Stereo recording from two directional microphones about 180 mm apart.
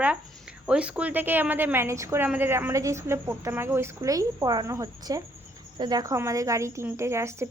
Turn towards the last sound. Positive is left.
turn(degrees=-15)  # may be behind; listen again after turning